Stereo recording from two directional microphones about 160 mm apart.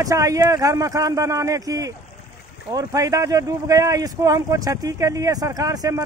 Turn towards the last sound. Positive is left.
turn(degrees=-25)  # may be behind; listen again after turning